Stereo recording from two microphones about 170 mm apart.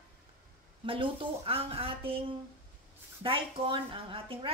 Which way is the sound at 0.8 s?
30° right (ahead or behind).